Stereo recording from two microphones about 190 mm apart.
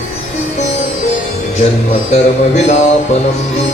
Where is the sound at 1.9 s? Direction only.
35° left (ahead or behind).